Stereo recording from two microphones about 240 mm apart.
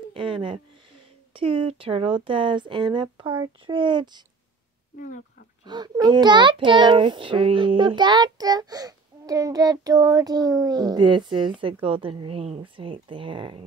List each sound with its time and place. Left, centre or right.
0.1 s a child's voice: right
4.9 s speech: left
5.7 s a child's voice: centre